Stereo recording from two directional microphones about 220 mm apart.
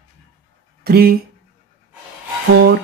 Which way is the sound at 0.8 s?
45° right (ahead or behind).